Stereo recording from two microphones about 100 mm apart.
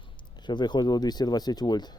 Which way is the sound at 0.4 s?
50° left (ahead or behind).